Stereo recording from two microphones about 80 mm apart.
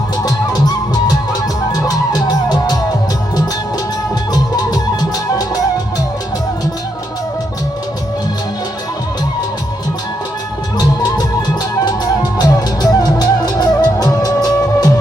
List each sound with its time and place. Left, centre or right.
0.2 s music: left
4.3 s music: left
10.8 s music: left